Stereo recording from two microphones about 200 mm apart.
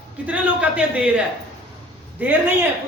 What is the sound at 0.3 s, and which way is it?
Speech, 5° right (ahead or behind).